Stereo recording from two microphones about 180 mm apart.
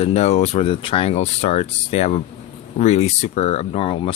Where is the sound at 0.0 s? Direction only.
35° left (ahead or behind).